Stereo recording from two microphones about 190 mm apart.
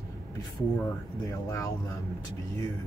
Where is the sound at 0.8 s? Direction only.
15° left (ahead or behind).